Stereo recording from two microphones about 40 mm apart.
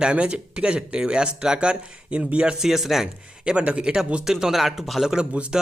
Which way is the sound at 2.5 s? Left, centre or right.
Centre.